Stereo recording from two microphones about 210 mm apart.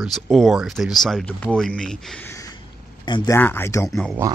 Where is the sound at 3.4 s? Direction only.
10° left (ahead or behind).